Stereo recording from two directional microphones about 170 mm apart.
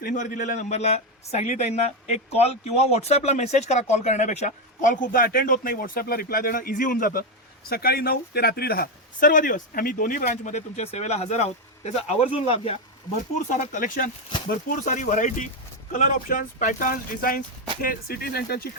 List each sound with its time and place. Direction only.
0.0 s a man's voice: 50° left (ahead or behind); by 12.7 s 35° left (ahead or behind)
13.3 s a man's voice: 50° left (ahead or behind); by 18.7 s 65° left (ahead or behind)